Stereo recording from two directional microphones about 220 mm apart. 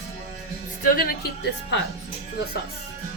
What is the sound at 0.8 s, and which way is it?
A woman's voice, 40° left (ahead or behind).